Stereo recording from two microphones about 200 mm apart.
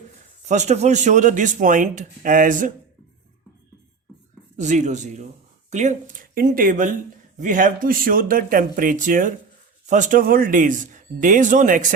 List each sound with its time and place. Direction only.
0.4 s speech: 35° right (ahead or behind)
4.5 s speech: 35° right (ahead or behind)